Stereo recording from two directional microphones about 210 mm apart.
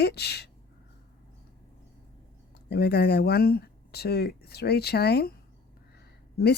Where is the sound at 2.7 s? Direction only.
50° left (ahead or behind).